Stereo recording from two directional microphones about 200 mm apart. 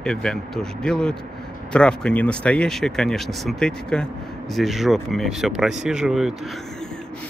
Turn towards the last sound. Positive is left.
turn(degrees=0)  # may be behind; listen again after turning